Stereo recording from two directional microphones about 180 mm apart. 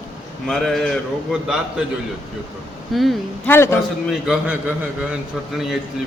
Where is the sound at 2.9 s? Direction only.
Centre (ahead or behind).